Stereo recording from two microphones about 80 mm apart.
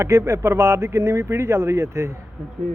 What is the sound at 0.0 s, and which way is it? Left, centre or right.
Speech, right.